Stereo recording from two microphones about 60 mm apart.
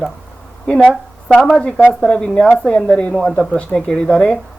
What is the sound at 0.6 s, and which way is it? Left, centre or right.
A woman's voice, centre.